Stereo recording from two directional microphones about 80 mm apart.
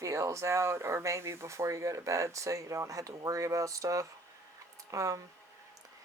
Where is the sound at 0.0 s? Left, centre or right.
Right.